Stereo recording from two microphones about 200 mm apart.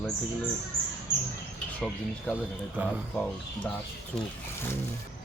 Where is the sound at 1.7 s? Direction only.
5° left (ahead or behind).